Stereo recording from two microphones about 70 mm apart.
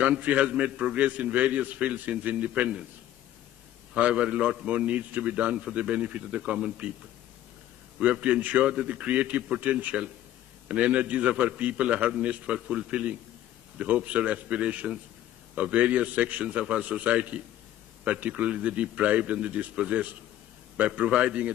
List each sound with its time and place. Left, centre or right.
0.0 s a man's voice: centre
3.9 s a man's voice: centre
8.0 s a man's voice: centre